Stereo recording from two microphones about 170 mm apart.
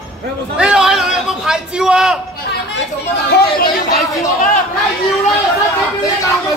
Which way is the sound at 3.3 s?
65° left (ahead or behind).